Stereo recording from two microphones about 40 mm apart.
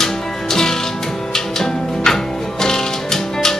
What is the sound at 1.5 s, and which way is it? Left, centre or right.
Music, centre.